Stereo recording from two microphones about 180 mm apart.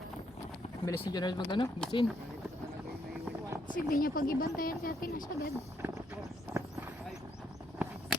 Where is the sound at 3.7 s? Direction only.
50° left (ahead or behind).